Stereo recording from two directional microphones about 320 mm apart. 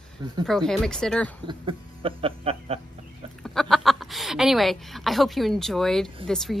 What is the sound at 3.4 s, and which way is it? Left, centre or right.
Speech, centre.